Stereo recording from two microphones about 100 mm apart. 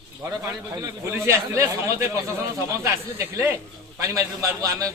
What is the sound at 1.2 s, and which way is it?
Speech, 30° right (ahead or behind).